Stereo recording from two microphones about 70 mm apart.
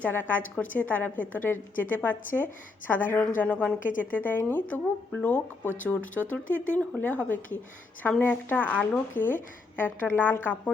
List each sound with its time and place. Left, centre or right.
0.0 s a woman's voice: left